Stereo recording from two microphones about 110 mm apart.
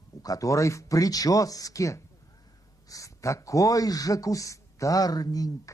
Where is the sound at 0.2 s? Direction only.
30° left (ahead or behind).